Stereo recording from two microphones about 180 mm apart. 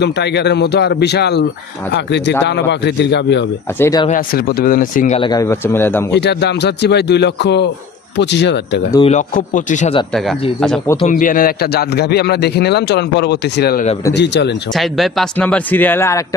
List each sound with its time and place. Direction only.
0.0 s a man's voice: 70° left (ahead or behind)
3.8 s speech: 20° left (ahead or behind)
4.1 s speech: 55° left (ahead or behind)
5.2 s speech: 20° left (ahead or behind)
6.1 s a man's voice: 70° left (ahead or behind)
9.0 s speech: 45° left (ahead or behind)
11.1 s a man's voice: 50° left (ahead or behind); by 14.5 s 70° left (ahead or behind)
14.7 s speech: centre (ahead or behind)